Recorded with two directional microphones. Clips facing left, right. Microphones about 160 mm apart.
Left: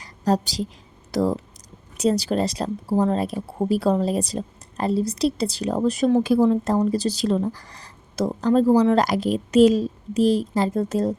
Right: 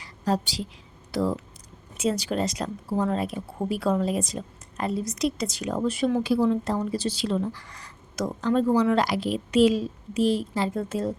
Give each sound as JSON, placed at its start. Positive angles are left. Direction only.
{"t": 0.4, "sound": "speech", "side_deg": 40}